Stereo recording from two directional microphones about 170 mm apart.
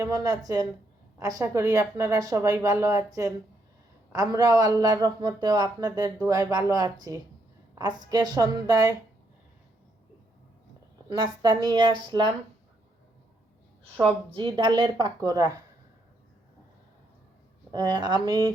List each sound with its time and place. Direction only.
0.0 s a woman's voice: 20° right (ahead or behind)
11.1 s a woman's voice: 25° right (ahead or behind)
14.3 s a woman's voice: 30° right (ahead or behind)
17.7 s a woman's voice: 25° right (ahead or behind)